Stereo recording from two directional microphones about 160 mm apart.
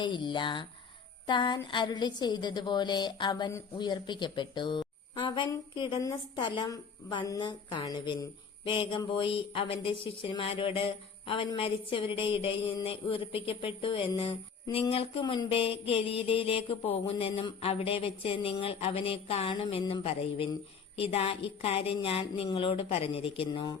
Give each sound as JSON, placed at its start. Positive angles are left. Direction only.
{"t": 0.0, "sound": "a woman's voice", "side_deg": 30}